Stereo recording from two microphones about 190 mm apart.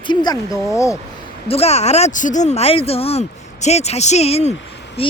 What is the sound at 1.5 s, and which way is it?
Speech, 35° left (ahead or behind).